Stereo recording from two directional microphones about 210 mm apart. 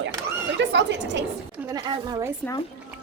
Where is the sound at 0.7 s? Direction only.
55° right (ahead or behind).